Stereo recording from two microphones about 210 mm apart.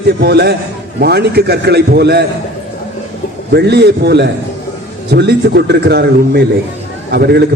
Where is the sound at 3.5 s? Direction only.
50° right (ahead or behind).